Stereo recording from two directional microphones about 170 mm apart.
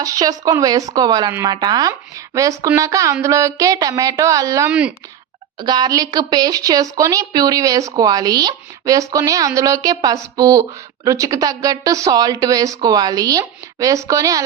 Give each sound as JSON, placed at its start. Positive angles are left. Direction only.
{"t": 0.0, "sound": "speech", "side_deg": -20}
{"t": 4.7, "sound": "speech", "side_deg": -5}
{"t": 5.5, "sound": "speech", "side_deg": -25}